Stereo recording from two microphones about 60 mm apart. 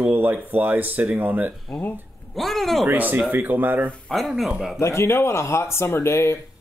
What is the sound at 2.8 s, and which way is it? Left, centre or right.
Speech, right.